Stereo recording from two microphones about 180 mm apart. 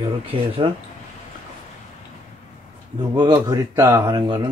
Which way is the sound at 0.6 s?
30° right (ahead or behind).